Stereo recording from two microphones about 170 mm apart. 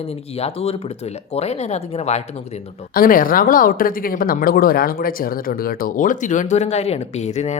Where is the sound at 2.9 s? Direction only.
55° left (ahead or behind).